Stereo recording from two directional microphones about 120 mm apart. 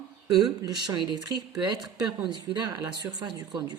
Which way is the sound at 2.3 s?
40° right (ahead or behind).